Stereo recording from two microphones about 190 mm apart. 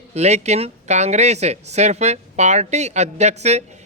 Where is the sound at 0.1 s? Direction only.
35° right (ahead or behind).